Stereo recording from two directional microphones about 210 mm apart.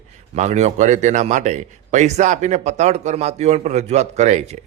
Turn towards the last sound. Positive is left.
turn(degrees=-35)  # may be behind; listen again after turning